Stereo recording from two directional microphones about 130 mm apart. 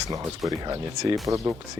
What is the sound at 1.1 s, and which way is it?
Speech, 25° right (ahead or behind).